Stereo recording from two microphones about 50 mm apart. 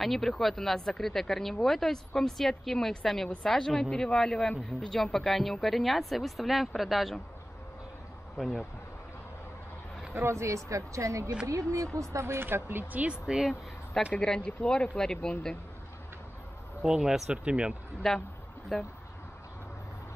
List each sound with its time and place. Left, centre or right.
0.0 s speech: centre
8.4 s speech: centre
10.1 s speech: right
12.4 s speech: right
12.9 s speech: right
14.1 s speech: centre
16.8 s speech: centre
18.0 s speech: centre